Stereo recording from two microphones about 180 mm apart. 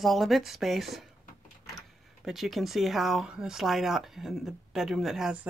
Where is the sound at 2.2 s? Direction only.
Centre (ahead or behind).